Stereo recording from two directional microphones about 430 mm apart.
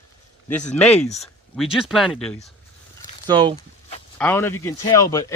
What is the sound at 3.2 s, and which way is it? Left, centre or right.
Speech, centre.